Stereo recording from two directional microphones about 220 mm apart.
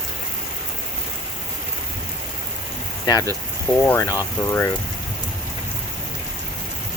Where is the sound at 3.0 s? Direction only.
15° left (ahead or behind).